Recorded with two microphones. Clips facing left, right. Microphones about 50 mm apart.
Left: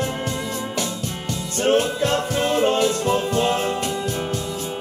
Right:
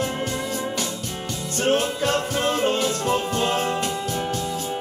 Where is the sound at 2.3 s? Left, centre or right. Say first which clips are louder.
Left 3 dB; centre.